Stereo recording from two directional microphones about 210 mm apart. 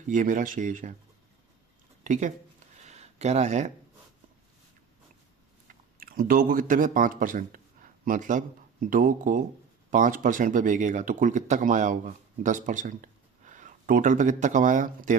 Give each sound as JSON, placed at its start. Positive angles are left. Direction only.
{"t": 0.1, "sound": "speech", "side_deg": -40}
{"t": 2.8, "sound": "a sound", "side_deg": -30}
{"t": 6.0, "sound": "speech", "side_deg": -45}